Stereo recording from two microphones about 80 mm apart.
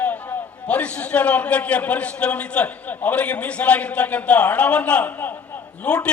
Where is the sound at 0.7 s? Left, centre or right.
Centre.